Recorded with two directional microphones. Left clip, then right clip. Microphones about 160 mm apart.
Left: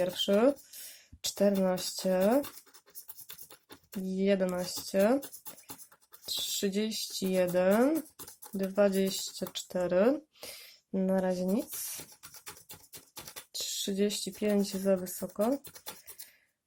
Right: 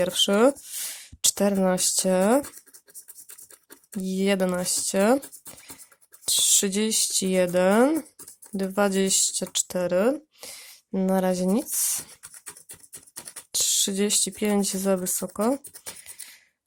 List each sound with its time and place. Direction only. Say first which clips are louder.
0.0 s speech: right 6 dB; 50° right (ahead or behind)
4.0 s speech: right 5 dB; 50° right (ahead or behind)
6.2 s speech: right 10 dB; 50° right (ahead or behind); by 10.7 s 25° right (ahead or behind)
10.9 s speech: right 6 dB; 45° right (ahead or behind)
13.5 s speech: right 11 dB; 55° right (ahead or behind)